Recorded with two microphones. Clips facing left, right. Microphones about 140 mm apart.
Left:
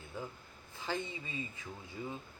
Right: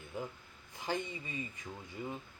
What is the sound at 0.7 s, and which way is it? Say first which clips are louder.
Speech: right 1 dB; 15° right (ahead or behind).